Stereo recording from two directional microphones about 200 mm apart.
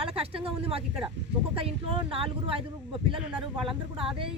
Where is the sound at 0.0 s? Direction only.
30° right (ahead or behind).